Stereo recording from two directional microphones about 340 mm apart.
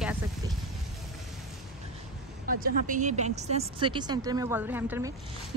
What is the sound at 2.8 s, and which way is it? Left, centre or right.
A woman's voice, right.